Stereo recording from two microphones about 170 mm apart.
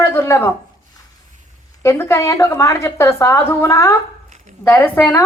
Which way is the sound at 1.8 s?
15° left (ahead or behind).